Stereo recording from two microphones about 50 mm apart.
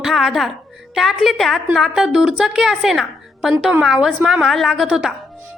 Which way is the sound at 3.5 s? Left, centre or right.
Centre.